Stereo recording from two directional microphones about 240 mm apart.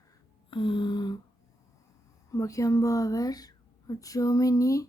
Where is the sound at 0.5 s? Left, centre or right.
Left.